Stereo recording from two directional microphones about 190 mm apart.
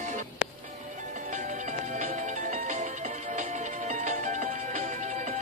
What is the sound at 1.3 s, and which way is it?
Music, 40° right (ahead or behind).